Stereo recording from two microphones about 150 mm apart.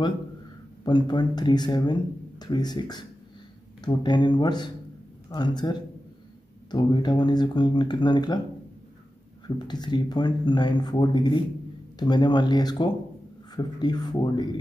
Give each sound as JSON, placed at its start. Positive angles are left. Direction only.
{"t": 0.8, "sound": "speech", "side_deg": 30}
{"t": 9.7, "sound": "speech", "side_deg": 30}